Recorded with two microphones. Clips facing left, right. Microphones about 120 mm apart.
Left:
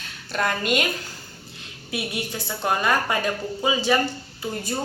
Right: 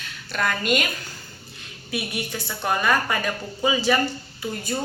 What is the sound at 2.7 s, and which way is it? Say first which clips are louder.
A woman's voice: even; 25° left (ahead or behind).